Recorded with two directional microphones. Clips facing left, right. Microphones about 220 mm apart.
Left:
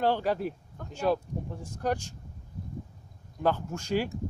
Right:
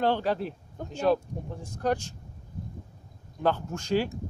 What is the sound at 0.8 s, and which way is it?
Speech, 20° right (ahead or behind).